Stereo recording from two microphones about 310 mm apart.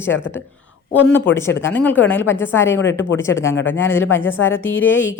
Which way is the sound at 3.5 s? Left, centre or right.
Left.